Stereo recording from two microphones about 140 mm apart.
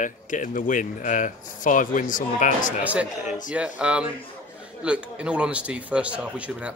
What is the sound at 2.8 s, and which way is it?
Speech, 10° right (ahead or behind).